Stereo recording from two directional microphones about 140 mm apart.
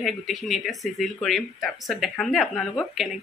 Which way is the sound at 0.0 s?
Centre (ahead or behind).